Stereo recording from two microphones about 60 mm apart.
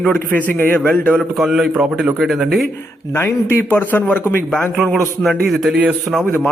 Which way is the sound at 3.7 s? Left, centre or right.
Left.